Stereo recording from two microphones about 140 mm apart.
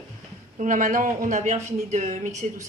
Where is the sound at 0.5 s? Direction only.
65° right (ahead or behind).